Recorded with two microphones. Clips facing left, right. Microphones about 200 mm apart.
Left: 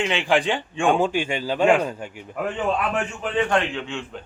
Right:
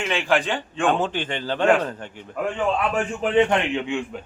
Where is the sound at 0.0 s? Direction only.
15° left (ahead or behind).